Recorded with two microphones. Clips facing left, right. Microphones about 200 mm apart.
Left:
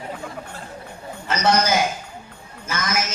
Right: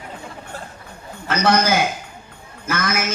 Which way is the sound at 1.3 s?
55° right (ahead or behind).